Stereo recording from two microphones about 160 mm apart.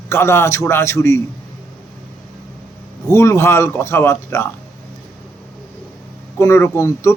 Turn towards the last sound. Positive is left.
turn(degrees=15)  # may be behind; listen again after turning